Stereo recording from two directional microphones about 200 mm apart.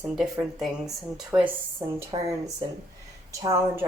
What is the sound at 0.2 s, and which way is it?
A woman's voice, centre (ahead or behind).